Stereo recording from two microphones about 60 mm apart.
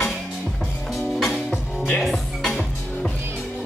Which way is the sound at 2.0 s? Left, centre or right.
Centre.